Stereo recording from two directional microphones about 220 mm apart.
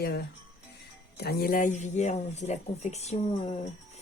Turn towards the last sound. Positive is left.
turn(degrees=30)  # may be behind; listen again after turning